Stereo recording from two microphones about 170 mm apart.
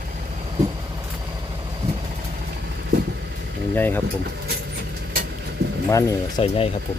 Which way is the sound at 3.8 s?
10° left (ahead or behind).